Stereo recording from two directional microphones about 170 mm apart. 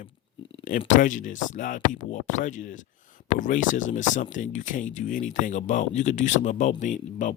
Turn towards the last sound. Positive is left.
turn(degrees=45)  # may be behind; listen again after turning